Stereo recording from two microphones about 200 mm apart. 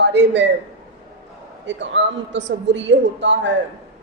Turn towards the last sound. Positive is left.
turn(degrees=-60)  # may be behind; listen again after turning